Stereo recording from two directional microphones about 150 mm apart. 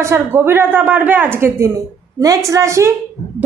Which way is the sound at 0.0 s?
15° right (ahead or behind).